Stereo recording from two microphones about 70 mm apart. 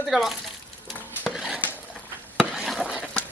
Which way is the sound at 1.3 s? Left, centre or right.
Centre.